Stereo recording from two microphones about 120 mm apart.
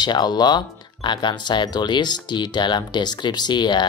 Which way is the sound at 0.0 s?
35° left (ahead or behind).